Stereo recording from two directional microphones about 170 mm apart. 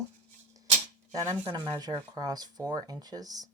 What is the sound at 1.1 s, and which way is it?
Speech, 15° right (ahead or behind).